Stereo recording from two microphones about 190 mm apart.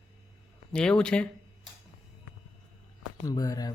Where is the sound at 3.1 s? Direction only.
20° left (ahead or behind).